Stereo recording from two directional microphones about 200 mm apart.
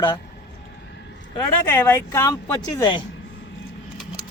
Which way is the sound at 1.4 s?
10° left (ahead or behind).